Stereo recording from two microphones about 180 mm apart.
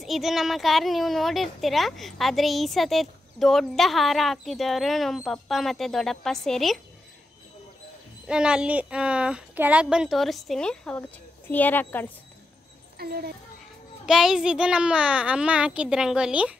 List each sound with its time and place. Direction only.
0.0 s speech: centre (ahead or behind)
8.3 s speech: 5° right (ahead or behind); by 12.1 s 10° left (ahead or behind)
12.9 s speech: 60° right (ahead or behind)
14.0 s speech: centre (ahead or behind)